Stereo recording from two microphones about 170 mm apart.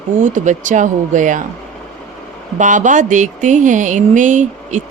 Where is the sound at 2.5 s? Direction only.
45° right (ahead or behind).